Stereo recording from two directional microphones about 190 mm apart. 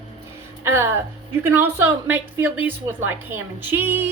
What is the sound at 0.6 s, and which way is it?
A woman's voice, 15° right (ahead or behind).